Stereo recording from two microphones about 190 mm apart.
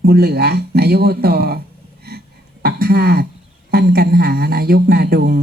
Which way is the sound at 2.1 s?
55° right (ahead or behind).